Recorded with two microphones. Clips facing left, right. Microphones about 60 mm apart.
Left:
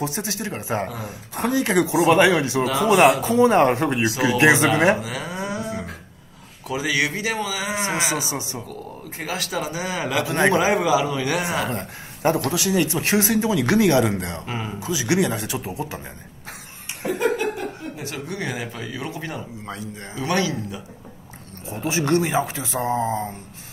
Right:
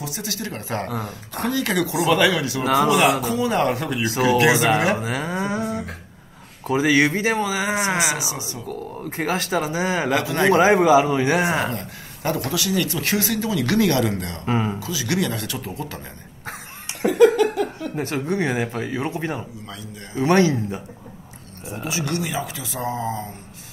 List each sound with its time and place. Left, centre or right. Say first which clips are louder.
0.0 s speech: left 3 dB; left
2.6 s speech: right 3 dB; right
3.3 s speech: left 5 dB; left
4.9 s moo: right 3 dB; right
6.7 s speech: right 5 dB; right
8.2 s speech: left 1 dB; left
8.6 s speech: right 5 dB; right
10.2 s speech: even; left
10.5 s speech: right 9 dB; right
11.7 s speech: left 1 dB; left
16.8 s laughter: right 8 dB; right
17.9 s speech: right 7 dB; right
21.8 s speech: left 6 dB; left